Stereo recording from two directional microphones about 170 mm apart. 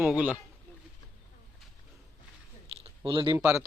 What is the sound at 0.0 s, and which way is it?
Speech, 10° right (ahead or behind).